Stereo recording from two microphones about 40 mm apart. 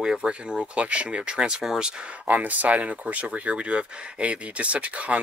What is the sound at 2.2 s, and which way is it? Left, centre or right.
Speech, right.